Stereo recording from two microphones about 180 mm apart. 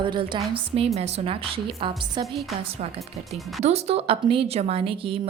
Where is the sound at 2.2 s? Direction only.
Centre (ahead or behind).